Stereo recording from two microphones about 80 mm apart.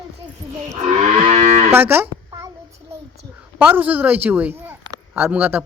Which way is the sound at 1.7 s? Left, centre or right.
Right.